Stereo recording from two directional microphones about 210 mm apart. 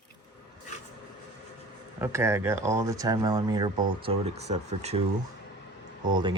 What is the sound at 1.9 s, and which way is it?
Speech, 15° right (ahead or behind).